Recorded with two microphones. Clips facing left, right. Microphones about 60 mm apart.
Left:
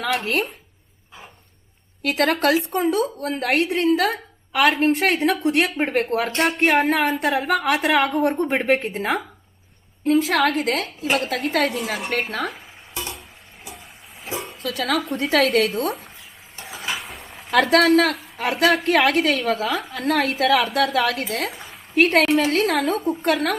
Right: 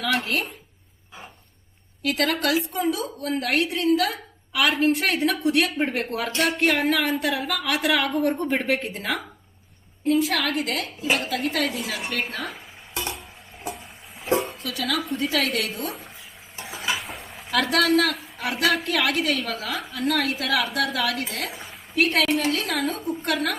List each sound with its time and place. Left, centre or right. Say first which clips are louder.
2.0 s a woman's voice: left 4 dB; left
10.1 s a woman's voice: left 4 dB; left
14.3 s a sound: right 6 dB; centre
14.6 s a woman's voice: left 4 dB; left
16.6 s a sound: right 1 dB; centre
17.5 s a woman's voice: left 5 dB; left
21.5 s a woman's voice: even; centre
21.9 s a woman's voice: left 5 dB; left